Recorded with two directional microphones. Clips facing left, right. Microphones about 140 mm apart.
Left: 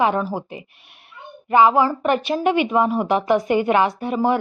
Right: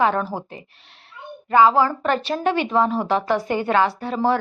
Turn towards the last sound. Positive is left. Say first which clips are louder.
# left 1 dB
turn(degrees=15)  # may be behind; listen again after turning